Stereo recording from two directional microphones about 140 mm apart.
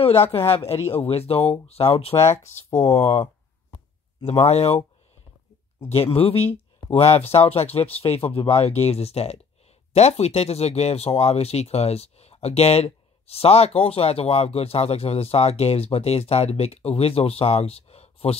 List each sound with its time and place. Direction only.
0.9 s speech: 45° left (ahead or behind)
4.3 s speech: 50° left (ahead or behind)
5.9 s speech: 45° left (ahead or behind)